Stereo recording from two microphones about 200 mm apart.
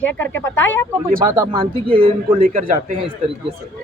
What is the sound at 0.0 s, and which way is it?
Speech, 10° left (ahead or behind).